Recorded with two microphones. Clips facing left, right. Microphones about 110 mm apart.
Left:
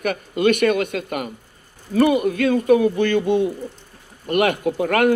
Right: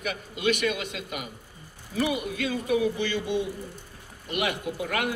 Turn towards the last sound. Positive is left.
turn(degrees=50)  # may be behind; listen again after turning